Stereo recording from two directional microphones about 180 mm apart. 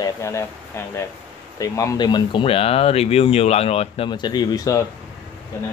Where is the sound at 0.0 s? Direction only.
15° left (ahead or behind).